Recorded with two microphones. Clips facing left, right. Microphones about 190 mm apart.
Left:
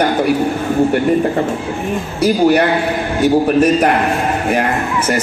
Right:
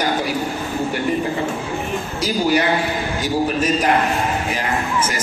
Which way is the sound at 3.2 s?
60° left (ahead or behind).